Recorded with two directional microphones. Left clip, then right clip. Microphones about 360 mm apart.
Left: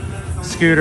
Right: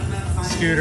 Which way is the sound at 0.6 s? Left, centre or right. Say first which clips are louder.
Left 7 dB; left.